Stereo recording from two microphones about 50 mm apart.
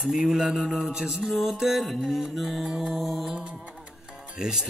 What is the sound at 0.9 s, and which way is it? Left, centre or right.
Speech, centre.